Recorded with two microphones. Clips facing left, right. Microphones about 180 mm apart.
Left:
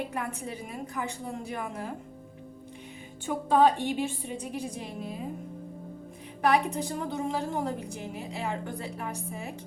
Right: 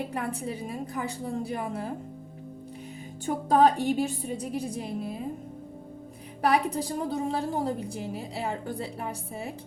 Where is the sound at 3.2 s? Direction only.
40° right (ahead or behind).